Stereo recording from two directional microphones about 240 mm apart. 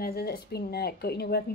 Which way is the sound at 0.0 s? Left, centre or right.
Left.